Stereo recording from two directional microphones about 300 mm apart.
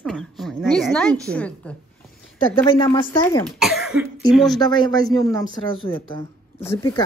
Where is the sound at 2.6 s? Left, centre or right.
Centre.